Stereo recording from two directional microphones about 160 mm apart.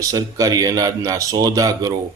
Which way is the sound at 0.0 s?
20° right (ahead or behind).